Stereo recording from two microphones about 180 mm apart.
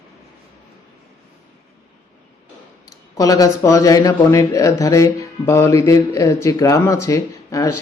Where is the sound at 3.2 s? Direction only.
20° left (ahead or behind).